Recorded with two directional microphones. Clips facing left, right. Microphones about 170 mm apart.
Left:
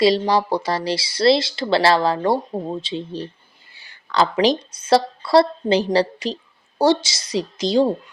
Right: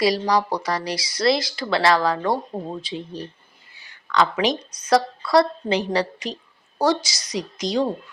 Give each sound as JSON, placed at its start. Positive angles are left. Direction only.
{"t": 0.0, "sound": "speech", "side_deg": 25}